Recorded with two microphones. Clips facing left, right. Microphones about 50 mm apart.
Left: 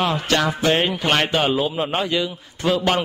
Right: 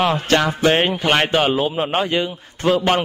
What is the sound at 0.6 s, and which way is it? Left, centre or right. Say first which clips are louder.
Speech: right 3 dB; right.